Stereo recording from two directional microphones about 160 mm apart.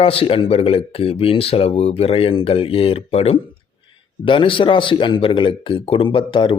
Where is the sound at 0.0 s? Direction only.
35° left (ahead or behind).